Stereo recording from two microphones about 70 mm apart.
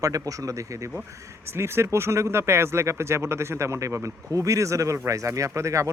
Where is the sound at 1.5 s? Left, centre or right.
Right.